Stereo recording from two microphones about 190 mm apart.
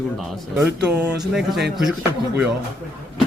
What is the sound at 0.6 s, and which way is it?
Speech, 15° right (ahead or behind).